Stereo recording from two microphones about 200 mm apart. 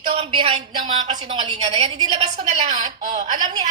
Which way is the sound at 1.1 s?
25° right (ahead or behind).